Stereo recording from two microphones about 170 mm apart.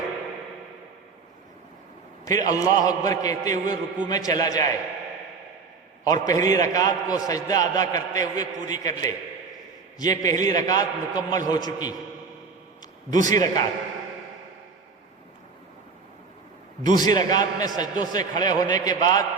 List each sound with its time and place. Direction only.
2.2 s a man's voice: 20° left (ahead or behind)
6.1 s a man's voice: 20° left (ahead or behind)
13.2 s a man's voice: 20° left (ahead or behind)
16.8 s a man's voice: 25° left (ahead or behind)